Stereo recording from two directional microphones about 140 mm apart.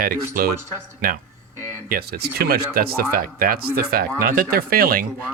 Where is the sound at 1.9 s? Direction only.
90° right.